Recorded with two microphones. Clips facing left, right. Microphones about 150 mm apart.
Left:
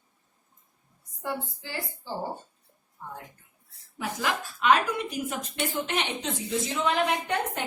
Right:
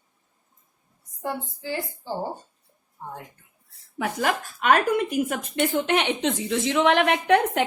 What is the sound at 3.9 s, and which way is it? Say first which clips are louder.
A woman's voice: right 5 dB; 55° right (ahead or behind).